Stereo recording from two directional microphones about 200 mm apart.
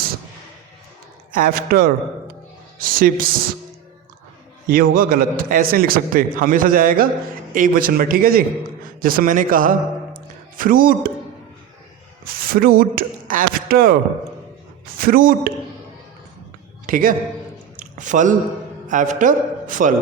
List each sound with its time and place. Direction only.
1.3 s a man's voice: 45° right (ahead or behind)
4.7 s a man's voice: 45° right (ahead or behind)
12.2 s speech: 45° right (ahead or behind)
14.9 s a man's voice: 45° right (ahead or behind)
16.8 s a man's voice: 45° right (ahead or behind)
17.7 s a sound: 40° right (ahead or behind)
18.9 s a man's voice: 40° right (ahead or behind)